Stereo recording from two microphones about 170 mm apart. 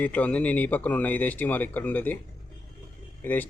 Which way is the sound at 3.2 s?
10° left (ahead or behind).